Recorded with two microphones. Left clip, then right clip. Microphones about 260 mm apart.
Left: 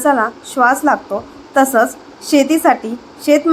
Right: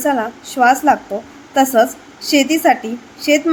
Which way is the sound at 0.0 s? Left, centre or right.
Centre.